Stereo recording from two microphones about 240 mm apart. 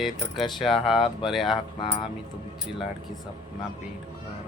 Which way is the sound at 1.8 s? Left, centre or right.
Left.